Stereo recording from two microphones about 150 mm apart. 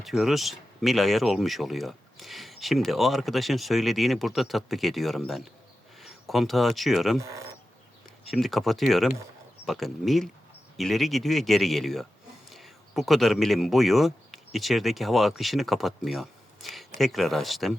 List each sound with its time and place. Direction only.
0.0 s speech: centre (ahead or behind)
7.2 s speech: 20° right (ahead or behind)
8.3 s speech: centre (ahead or behind)